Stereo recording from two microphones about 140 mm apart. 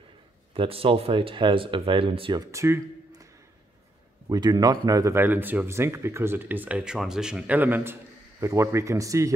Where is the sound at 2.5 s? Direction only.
20° right (ahead or behind).